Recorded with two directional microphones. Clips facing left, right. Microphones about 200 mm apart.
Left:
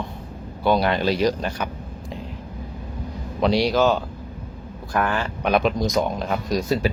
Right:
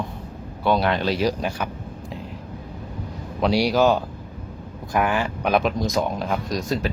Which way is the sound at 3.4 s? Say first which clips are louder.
Even; 10° right (ahead or behind).